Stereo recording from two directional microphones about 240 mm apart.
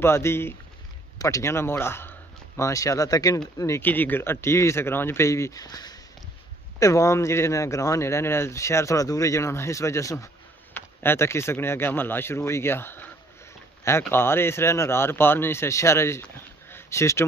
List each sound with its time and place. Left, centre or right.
0.0 s a man's voice: centre